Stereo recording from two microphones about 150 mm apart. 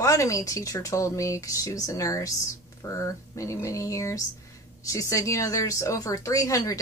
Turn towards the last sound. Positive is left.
turn(degrees=20)  # may be behind; listen again after turning